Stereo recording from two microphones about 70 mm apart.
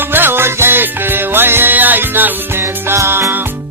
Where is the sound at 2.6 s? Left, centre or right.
Right.